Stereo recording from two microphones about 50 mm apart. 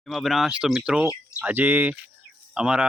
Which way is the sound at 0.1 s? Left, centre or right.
Centre.